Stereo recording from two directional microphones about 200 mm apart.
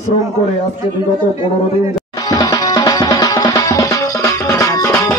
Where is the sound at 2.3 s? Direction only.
20° left (ahead or behind).